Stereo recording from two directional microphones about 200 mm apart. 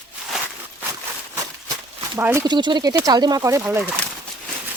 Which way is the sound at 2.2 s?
10° right (ahead or behind).